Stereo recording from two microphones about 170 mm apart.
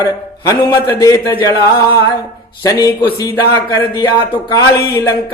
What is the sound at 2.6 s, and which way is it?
A man's voice, 20° left (ahead or behind).